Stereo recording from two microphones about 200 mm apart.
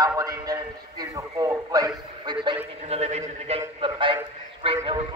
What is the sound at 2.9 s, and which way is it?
A man's voice, 35° right (ahead or behind).